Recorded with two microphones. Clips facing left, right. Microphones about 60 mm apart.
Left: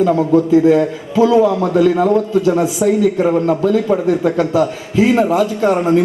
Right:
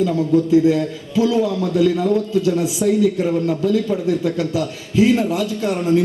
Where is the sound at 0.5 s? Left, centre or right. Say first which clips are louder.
Left 4 dB; left.